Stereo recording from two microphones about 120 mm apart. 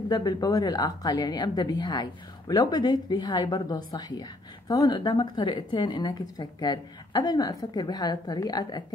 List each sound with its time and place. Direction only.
0.1 s a woman's voice: 35° left (ahead or behind)